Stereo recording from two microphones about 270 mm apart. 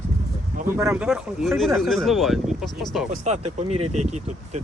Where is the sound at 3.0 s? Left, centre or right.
Right.